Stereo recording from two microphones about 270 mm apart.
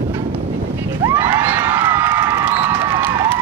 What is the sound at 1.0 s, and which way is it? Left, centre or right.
Cheering, centre.